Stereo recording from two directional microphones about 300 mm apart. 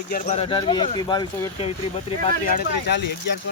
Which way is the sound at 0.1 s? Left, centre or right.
Centre.